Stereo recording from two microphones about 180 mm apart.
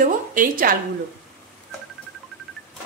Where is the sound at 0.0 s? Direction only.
50° right (ahead or behind).